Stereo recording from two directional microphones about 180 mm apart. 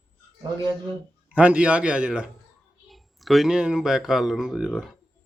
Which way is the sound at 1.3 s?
5° right (ahead or behind).